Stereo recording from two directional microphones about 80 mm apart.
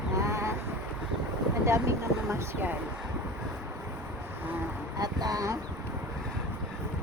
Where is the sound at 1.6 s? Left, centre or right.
Right.